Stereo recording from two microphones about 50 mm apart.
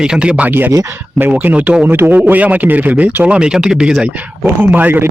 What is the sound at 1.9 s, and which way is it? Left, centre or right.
A man's voice, right.